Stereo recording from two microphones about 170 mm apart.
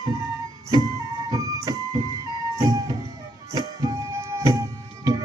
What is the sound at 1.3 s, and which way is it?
Music, 20° right (ahead or behind).